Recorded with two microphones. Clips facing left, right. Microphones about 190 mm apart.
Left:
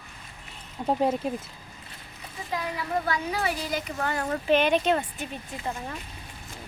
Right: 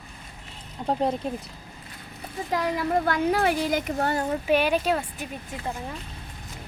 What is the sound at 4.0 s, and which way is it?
Speech, 35° right (ahead or behind).